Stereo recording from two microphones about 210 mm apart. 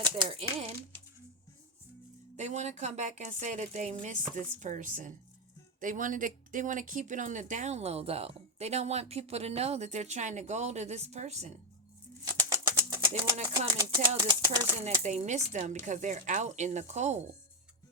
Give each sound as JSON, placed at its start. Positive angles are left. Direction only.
{"t": 0.0, "sound": "speech", "side_deg": -25}
{"t": 2.3, "sound": "speech", "side_deg": -35}
{"t": 12.2, "sound": "bird", "side_deg": -15}
{"t": 13.3, "sound": "speech", "side_deg": -25}
{"t": 14.8, "sound": "speech", "side_deg": -35}